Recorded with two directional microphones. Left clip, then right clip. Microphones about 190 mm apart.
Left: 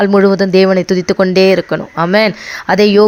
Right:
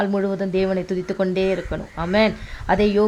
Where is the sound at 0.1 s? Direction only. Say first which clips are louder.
Left 13 dB; 40° left (ahead or behind).